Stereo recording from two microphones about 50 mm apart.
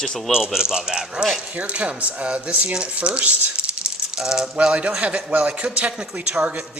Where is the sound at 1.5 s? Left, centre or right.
Right.